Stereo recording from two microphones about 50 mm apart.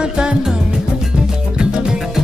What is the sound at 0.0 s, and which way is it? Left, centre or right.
Music, centre.